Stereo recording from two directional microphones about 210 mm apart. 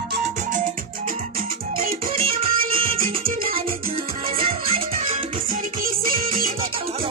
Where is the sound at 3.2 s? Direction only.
45° right (ahead or behind).